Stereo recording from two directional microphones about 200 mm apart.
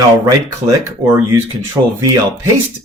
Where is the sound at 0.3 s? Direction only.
10° right (ahead or behind).